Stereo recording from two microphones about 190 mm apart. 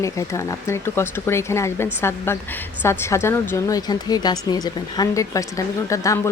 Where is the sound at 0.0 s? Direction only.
15° left (ahead or behind).